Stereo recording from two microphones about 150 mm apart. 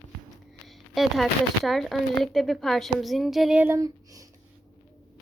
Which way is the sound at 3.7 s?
20° right (ahead or behind).